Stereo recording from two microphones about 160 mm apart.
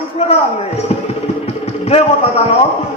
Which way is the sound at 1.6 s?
40° left (ahead or behind).